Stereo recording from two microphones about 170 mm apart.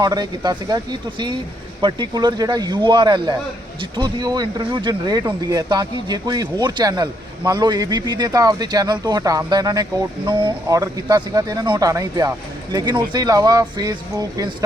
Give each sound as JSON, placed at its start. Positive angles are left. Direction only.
{"t": 0.0, "sound": "speech", "side_deg": -25}